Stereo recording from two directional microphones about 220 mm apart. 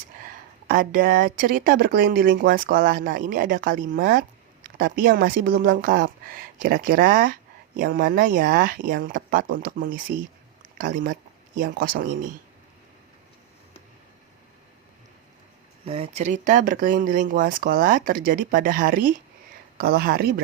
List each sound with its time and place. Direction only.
0.2 s a woman's voice: 40° right (ahead or behind)
15.9 s a woman's voice: 30° right (ahead or behind)